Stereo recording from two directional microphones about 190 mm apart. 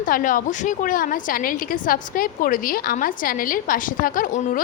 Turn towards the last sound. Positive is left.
turn(degrees=45)  # may be behind; listen again after turning